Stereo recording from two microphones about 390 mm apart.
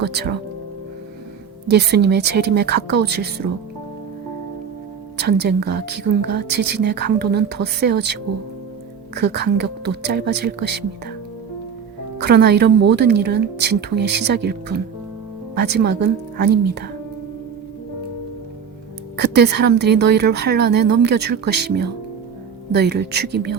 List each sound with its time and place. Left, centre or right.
0.1 s speech: right
1.9 s speech: right
3.2 s speech: right
5.2 s speech: right
12.2 s speech: right
19.1 s a woman's voice: right